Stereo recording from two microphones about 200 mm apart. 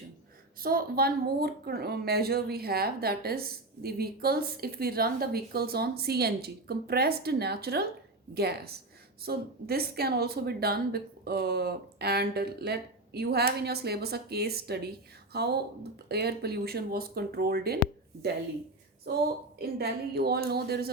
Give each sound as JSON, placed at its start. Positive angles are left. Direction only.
{"t": 0.6, "sound": "a woman's voice", "side_deg": -45}
{"t": 19.1, "sound": "a woman's voice", "side_deg": -50}